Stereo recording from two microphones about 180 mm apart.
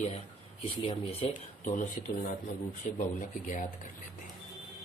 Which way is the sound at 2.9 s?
45° left (ahead or behind).